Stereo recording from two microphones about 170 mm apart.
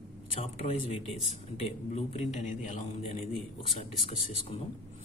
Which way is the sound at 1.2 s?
40° left (ahead or behind).